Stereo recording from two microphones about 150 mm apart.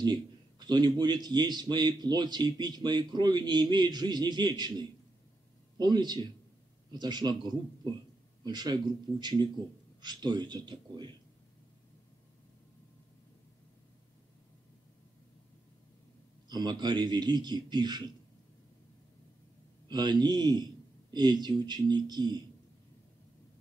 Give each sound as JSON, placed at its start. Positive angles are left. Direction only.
{"t": 0.0, "sound": "a man's voice", "side_deg": -30}
{"t": 16.4, "sound": "a man's voice", "side_deg": -30}
{"t": 19.9, "sound": "a man's voice", "side_deg": -30}